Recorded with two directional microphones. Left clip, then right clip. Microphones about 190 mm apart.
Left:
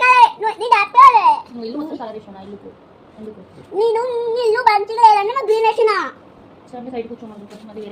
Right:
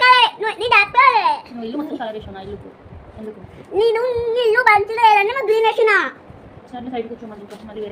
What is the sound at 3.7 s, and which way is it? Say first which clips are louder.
Child singing: even; 5° right (ahead or behind).